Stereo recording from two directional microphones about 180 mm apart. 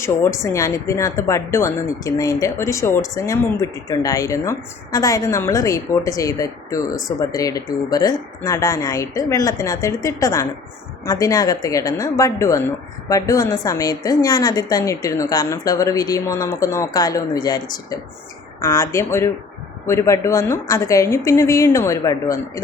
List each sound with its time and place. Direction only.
0.0 s a woman's voice: 15° left (ahead or behind)